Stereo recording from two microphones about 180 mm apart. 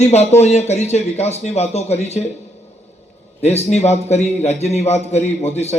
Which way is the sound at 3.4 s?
35° left (ahead or behind).